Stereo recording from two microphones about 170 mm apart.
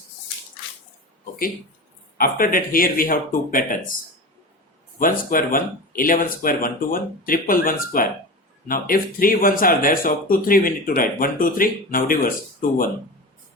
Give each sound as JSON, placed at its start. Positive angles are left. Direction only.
{"t": 2.1, "sound": "speech", "side_deg": 55}
{"t": 4.9, "sound": "speech", "side_deg": 55}